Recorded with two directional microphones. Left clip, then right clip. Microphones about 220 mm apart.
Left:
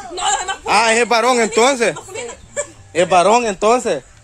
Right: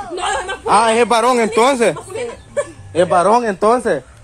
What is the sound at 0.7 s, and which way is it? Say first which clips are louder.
A man's voice: right 1 dB; 15° left (ahead or behind).